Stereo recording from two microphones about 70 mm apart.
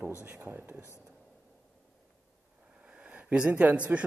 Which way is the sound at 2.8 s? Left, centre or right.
Centre.